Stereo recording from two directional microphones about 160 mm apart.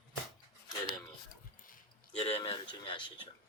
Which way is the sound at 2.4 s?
30° left (ahead or behind).